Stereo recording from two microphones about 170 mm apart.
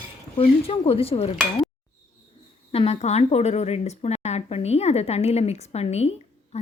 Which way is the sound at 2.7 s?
35° left (ahead or behind).